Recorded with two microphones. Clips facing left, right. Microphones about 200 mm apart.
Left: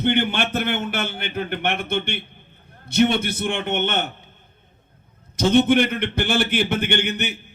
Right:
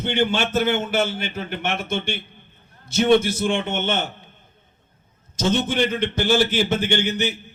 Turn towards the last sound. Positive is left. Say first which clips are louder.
# right 2 dB
turn(degrees=60)  # may be behind; listen again after turning